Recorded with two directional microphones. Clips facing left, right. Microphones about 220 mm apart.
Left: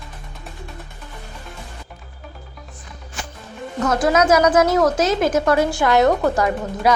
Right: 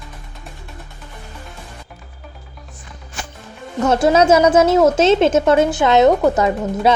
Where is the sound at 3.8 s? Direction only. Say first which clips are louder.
Right 4 dB; 25° right (ahead or behind).